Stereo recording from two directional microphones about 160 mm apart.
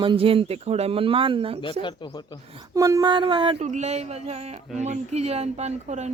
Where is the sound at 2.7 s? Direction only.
20° right (ahead or behind).